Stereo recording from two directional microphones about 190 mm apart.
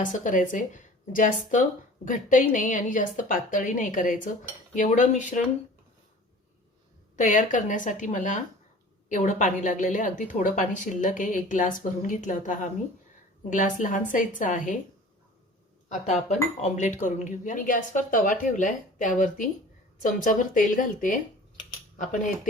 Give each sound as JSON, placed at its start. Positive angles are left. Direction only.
{"t": 0.0, "sound": "a woman's voice", "side_deg": 45}
{"t": 7.2, "sound": "a woman's voice", "side_deg": 40}
{"t": 15.9, "sound": "a woman's voice", "side_deg": 40}